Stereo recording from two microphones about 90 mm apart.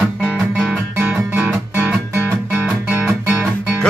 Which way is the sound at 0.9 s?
20° right (ahead or behind).